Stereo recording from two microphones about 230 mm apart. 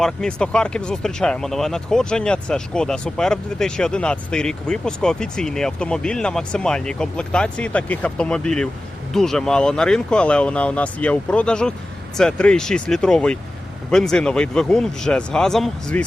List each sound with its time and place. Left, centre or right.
0.0 s speech: centre